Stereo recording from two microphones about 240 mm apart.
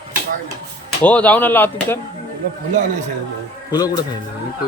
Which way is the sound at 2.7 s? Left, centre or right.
Right.